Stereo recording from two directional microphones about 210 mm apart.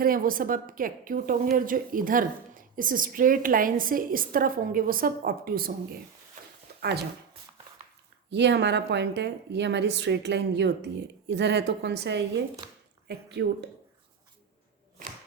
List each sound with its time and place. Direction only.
0.0 s a woman's voice: 40° right (ahead or behind)
6.7 s a sound: 50° right (ahead or behind)
8.3 s a woman's voice: 55° right (ahead or behind)